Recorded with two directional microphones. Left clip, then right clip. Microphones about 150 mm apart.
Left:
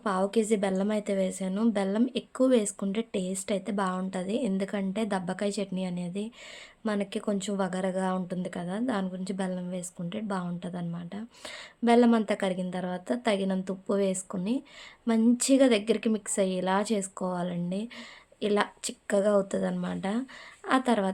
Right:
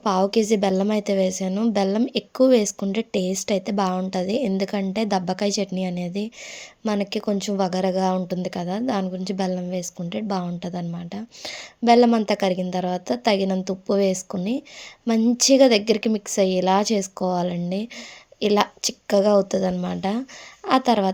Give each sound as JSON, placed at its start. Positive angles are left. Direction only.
{"t": 0.0, "sound": "a woman's voice", "side_deg": -35}